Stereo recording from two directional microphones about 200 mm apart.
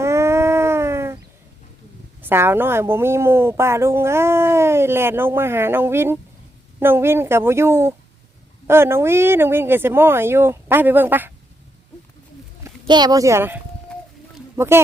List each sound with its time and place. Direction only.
0.0 s a sound: 15° right (ahead or behind)
2.2 s a woman's voice: 10° right (ahead or behind)
12.9 s a woman's voice: 20° right (ahead or behind)